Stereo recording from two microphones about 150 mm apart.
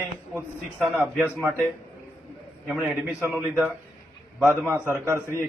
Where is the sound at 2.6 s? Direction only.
5° right (ahead or behind).